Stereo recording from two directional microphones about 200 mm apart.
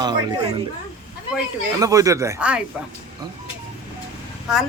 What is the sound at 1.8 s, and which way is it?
Speech, 15° right (ahead or behind).